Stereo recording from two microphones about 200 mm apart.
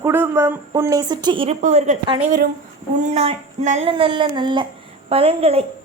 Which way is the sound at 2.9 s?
35° right (ahead or behind).